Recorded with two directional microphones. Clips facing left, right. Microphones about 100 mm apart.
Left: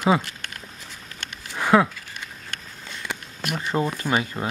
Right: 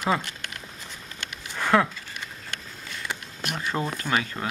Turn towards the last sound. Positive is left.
turn(degrees=20)  # may be behind; listen again after turning